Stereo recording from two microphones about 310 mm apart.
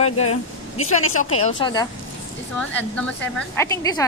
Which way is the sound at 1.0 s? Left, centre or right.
Left.